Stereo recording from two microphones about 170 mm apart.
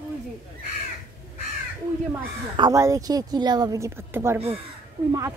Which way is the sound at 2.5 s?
20° right (ahead or behind).